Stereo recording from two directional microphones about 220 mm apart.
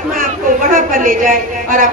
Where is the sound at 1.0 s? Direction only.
40° right (ahead or behind).